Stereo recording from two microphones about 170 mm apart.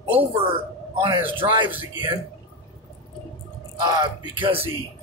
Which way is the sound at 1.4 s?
30° right (ahead or behind).